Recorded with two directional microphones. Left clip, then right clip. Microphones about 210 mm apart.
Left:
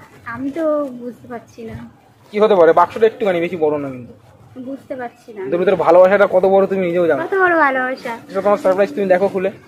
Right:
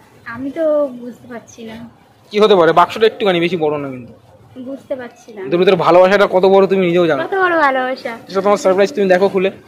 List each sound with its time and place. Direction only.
0.2 s speech: 10° left (ahead or behind)
2.3 s a man's voice: 55° right (ahead or behind)
4.8 s a woman's voice: 15° left (ahead or behind)
5.5 s a man's voice: 50° right (ahead or behind)
7.2 s a woman's voice: 5° left (ahead or behind)
8.3 s a man's voice: 50° right (ahead or behind)